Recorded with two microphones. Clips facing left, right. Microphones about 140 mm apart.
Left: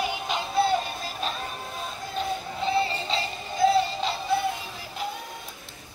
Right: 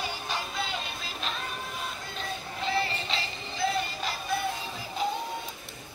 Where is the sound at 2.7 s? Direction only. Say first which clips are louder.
Left 4 dB; 25° left (ahead or behind).